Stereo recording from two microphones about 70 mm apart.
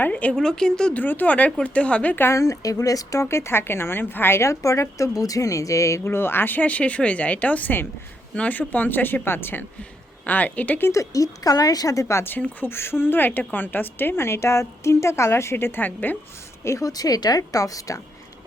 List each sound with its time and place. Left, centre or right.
0.0 s speech: left
0.4 s speech: centre
0.9 s speech: left
2.3 s a woman's voice: left
3.2 s a woman's voice: left
6.1 s speech: left
10.9 s a woman's voice: left
16.6 s a woman's voice: left
16.9 s a woman's voice: left